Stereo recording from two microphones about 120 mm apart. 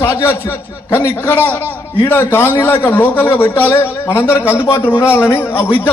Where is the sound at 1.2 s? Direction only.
15° left (ahead or behind).